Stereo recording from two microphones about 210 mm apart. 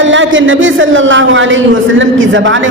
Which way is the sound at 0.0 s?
65° right (ahead or behind).